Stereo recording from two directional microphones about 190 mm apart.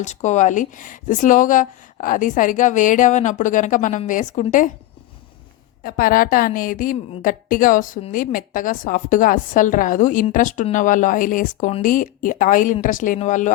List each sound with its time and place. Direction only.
0.0 s speech: 40° left (ahead or behind)
5.8 s speech: 50° left (ahead or behind)